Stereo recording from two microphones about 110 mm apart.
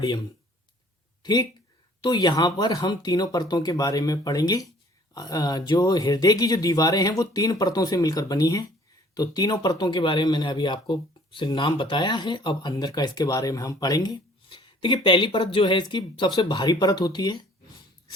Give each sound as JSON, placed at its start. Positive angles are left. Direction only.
{"t": 0.0, "sound": "speech", "side_deg": 40}
{"t": 14.5, "sound": "speech", "side_deg": 50}